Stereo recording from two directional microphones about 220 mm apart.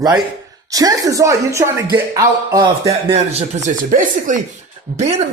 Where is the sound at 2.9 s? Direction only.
30° right (ahead or behind).